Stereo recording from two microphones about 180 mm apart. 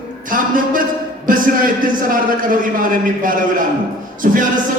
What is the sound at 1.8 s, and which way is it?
A man's voice, 50° right (ahead or behind).